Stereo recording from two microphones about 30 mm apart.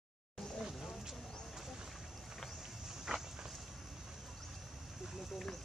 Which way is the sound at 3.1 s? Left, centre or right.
Right.